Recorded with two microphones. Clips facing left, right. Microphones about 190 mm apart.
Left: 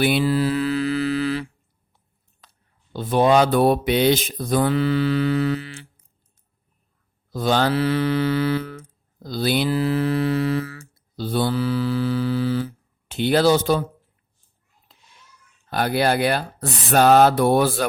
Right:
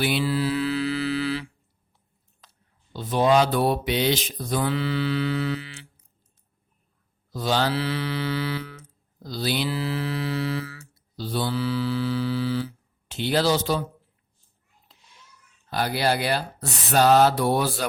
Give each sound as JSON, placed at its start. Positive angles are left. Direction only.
{"t": 0.0, "sound": "mantra", "side_deg": 50}
{"t": 2.9, "sound": "speech", "side_deg": 55}
{"t": 7.3, "sound": "mantra", "side_deg": 55}
{"t": 15.7, "sound": "speech", "side_deg": 55}